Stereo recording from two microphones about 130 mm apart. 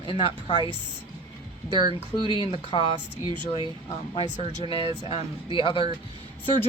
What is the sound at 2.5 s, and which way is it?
Speech, 40° left (ahead or behind).